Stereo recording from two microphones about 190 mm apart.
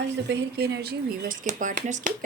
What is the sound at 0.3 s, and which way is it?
Speech, 60° right (ahead or behind).